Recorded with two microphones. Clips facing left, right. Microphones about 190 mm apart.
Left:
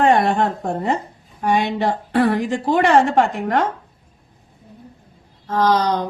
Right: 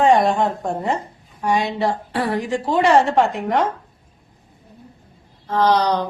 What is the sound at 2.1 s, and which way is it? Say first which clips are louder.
Speech: left 4 dB; 55° left (ahead or behind).